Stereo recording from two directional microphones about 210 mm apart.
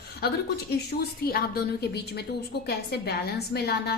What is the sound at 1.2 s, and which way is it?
Speech, 45° left (ahead or behind).